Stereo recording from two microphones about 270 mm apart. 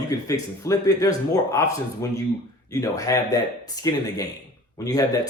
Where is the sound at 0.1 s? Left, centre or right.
Centre.